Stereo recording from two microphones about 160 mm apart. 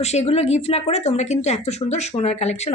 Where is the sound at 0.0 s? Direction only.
45° left (ahead or behind).